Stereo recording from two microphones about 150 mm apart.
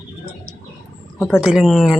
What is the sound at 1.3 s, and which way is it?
Speech, 5° right (ahead or behind).